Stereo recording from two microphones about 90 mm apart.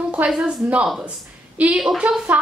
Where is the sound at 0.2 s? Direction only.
15° right (ahead or behind).